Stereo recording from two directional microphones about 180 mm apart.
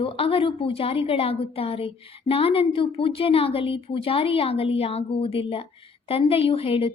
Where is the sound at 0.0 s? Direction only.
30° left (ahead or behind).